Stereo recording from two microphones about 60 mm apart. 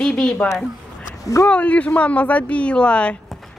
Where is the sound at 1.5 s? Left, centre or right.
Left.